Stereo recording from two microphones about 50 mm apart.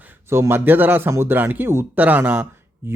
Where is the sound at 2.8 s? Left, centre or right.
Right.